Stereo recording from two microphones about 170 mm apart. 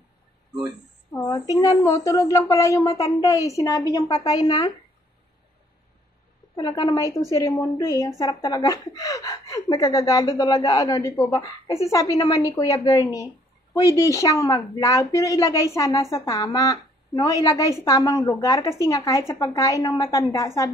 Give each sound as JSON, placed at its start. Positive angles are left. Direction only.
{"t": 1.1, "sound": "a sound", "side_deg": 15}
{"t": 1.5, "sound": "a woman's voice", "side_deg": 20}
{"t": 6.5, "sound": "a woman's voice", "side_deg": 20}